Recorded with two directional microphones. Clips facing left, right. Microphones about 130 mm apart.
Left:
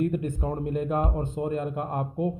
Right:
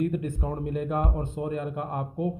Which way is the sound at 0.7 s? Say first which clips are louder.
Left 1 dB; 30° left (ahead or behind).